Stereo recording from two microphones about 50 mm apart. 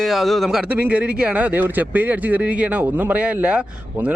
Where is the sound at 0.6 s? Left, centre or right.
Right.